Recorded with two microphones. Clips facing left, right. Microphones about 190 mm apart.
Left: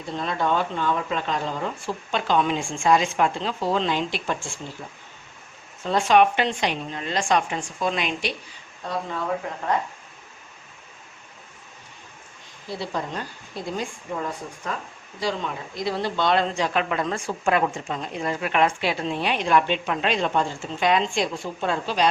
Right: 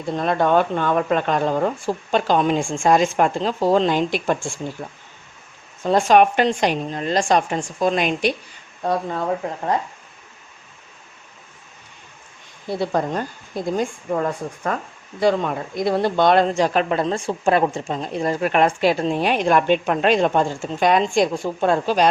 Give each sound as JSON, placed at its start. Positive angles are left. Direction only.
{"t": 0.2, "sound": "speech", "side_deg": -55}
{"t": 5.8, "sound": "speech", "side_deg": -45}
{"t": 12.6, "sound": "speech", "side_deg": -50}